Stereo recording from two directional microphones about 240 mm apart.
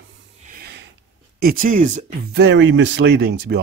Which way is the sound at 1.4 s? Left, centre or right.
Right.